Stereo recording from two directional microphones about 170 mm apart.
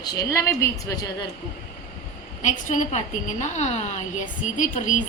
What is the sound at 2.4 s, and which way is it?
A woman's voice, 45° left (ahead or behind).